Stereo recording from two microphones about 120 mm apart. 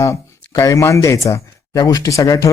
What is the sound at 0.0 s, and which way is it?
Speech, 25° left (ahead or behind).